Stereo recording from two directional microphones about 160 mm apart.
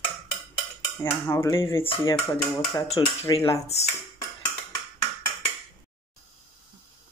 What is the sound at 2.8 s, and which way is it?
Speech, 35° left (ahead or behind).